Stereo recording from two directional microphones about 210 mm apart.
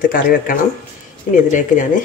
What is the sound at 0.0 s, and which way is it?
Speech, 40° left (ahead or behind).